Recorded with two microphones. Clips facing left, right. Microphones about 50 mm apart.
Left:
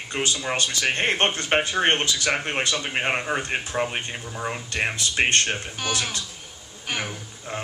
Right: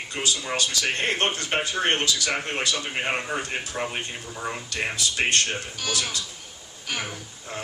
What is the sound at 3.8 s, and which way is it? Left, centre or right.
Speech, centre.